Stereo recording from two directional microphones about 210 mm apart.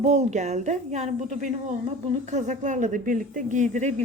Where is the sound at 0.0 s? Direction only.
30° right (ahead or behind).